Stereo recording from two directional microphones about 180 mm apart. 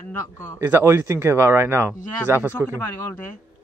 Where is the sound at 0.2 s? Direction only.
20° left (ahead or behind).